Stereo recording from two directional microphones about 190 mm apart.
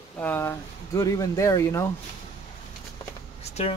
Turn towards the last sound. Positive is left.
turn(degrees=30)  # may be behind; listen again after turning